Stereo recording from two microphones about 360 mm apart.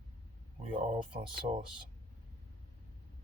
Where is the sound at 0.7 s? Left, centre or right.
Centre.